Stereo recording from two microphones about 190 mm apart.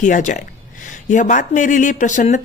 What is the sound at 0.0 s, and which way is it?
Speech, 40° left (ahead or behind).